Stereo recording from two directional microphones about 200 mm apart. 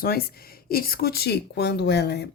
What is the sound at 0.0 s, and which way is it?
Speech, 50° left (ahead or behind).